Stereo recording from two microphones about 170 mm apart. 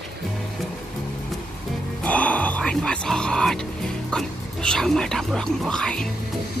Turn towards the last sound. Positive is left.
turn(degrees=5)  # may be behind; listen again after turning